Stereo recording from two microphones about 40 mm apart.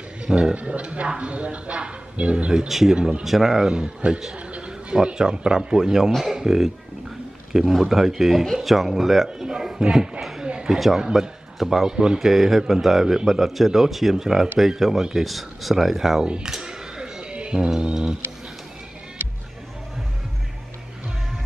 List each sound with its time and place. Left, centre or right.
0.2 s a sound: right
0.6 s speech: right
2.7 s a man's voice: centre
3.0 s a man's voice: right
3.3 s a man's voice: centre
3.6 s a man's voice: right
4.4 s a sound: right
4.6 s a man's voice: right; by 9.3 s centre
9.4 s speech: centre
10.4 s a sound: right
10.7 s a man's voice: centre
12.3 s a man's voice: centre
16.4 s a sound: centre
17.6 s a man's voice: centre